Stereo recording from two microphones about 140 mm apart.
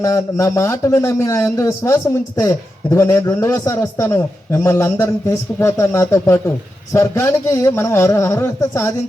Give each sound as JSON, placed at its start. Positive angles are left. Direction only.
{"t": 0.0, "sound": "a man's voice", "side_deg": 20}